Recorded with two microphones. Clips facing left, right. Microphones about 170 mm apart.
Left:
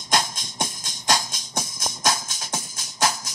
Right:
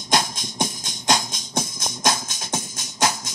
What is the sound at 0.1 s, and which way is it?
Music, 15° right (ahead or behind).